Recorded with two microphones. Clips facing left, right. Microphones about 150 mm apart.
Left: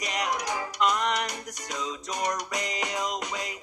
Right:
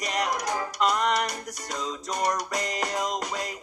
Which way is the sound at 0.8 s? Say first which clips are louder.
Right 1 dB; 35° right (ahead or behind).